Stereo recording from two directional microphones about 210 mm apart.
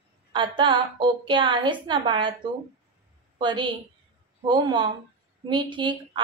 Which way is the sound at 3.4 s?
20° right (ahead or behind).